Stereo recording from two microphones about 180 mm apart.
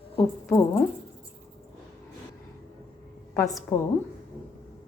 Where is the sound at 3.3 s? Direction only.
15° left (ahead or behind).